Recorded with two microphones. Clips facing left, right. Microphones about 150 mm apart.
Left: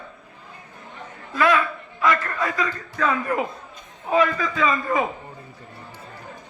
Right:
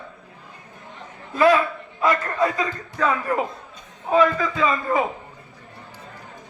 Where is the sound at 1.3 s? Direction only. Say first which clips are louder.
Right 3 dB; 35° right (ahead or behind).